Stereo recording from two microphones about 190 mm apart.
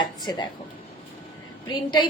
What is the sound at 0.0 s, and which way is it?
Speech, 20° left (ahead or behind).